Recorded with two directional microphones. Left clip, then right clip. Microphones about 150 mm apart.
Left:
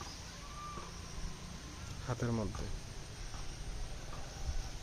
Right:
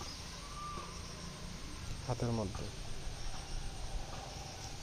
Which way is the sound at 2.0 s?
20° left (ahead or behind).